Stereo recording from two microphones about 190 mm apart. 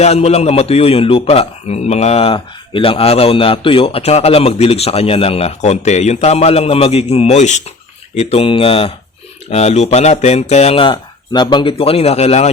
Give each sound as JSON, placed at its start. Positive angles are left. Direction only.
{"t": 0.0, "sound": "a man's voice", "side_deg": 35}